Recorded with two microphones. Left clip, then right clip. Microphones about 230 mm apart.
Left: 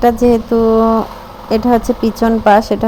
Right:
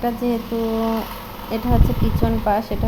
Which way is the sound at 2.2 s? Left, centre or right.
Left.